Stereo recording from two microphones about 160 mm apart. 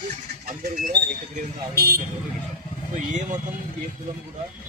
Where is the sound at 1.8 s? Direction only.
75° right (ahead or behind).